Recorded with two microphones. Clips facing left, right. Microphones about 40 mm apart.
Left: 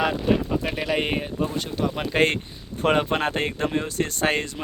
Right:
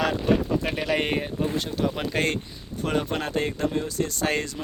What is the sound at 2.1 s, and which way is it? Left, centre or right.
Speech, left.